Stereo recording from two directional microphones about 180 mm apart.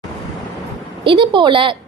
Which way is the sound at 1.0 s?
25° right (ahead or behind).